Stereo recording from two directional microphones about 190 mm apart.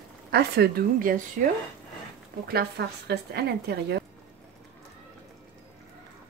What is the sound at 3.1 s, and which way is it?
Speech, 60° right (ahead or behind).